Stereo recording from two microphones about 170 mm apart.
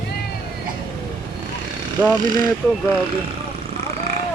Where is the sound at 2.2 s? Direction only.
55° right (ahead or behind).